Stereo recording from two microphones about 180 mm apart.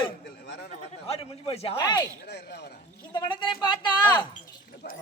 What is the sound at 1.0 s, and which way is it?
Speech, 35° left (ahead or behind).